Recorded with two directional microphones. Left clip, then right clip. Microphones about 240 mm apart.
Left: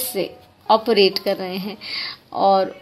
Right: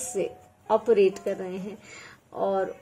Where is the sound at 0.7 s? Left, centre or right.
Left.